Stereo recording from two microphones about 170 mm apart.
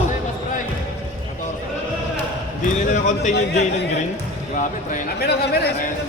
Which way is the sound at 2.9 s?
45° left (ahead or behind).